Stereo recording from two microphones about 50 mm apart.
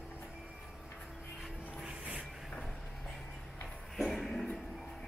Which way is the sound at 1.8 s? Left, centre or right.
Right.